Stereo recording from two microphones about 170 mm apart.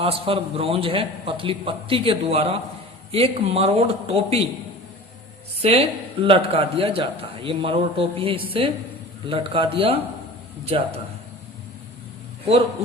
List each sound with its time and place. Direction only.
0.0 s a man's voice: 35° right (ahead or behind)
5.6 s a man's voice: 40° right (ahead or behind)